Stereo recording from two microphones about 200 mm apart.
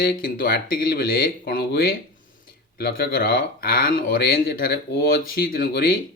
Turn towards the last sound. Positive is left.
turn(degrees=50)  # may be behind; listen again after turning